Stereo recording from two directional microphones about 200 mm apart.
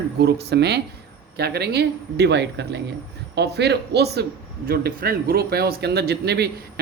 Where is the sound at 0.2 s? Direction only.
55° right (ahead or behind).